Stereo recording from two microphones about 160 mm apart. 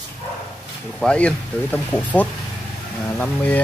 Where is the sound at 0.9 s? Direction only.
5° left (ahead or behind).